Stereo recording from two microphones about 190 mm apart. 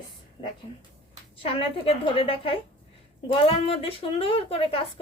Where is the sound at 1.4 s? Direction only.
30° left (ahead or behind).